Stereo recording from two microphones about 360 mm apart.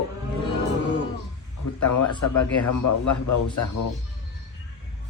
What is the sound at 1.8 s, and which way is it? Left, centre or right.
Speech, left.